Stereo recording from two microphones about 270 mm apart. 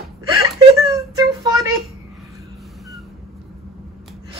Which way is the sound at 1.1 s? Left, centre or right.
Centre.